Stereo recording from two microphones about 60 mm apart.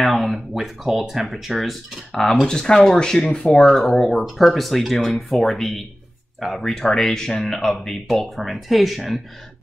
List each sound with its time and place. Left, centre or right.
0.0 s speech: centre